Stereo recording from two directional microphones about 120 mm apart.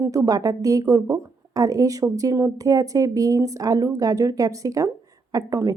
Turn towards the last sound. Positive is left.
turn(degrees=-30)  # may be behind; listen again after turning